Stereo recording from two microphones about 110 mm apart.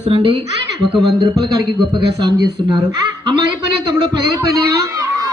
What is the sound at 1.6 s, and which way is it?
Speech, 45° right (ahead or behind).